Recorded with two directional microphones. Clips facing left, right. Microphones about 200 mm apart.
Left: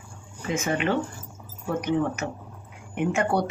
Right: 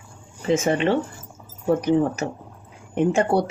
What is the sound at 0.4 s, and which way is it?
Speech, 30° right (ahead or behind).